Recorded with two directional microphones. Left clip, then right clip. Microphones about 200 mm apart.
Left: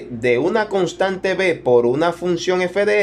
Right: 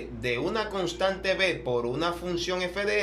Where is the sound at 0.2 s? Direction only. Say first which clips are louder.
Left 12 dB; 35° left (ahead or behind).